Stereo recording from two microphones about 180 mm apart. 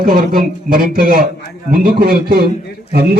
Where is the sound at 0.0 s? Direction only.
50° right (ahead or behind).